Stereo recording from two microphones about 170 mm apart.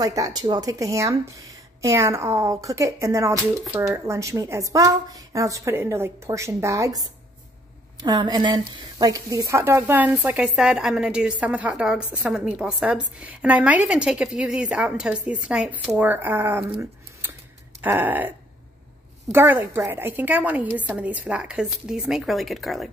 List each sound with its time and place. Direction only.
0.0 s a woman's voice: 20° right (ahead or behind)
19.3 s a woman's voice: 15° right (ahead or behind)